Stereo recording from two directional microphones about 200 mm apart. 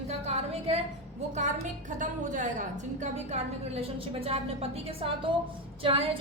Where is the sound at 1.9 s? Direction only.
40° right (ahead or behind).